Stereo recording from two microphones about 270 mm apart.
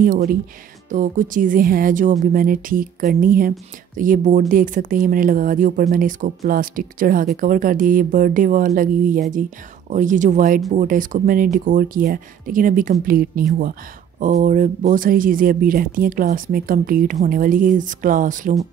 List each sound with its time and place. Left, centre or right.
0.0 s speech: right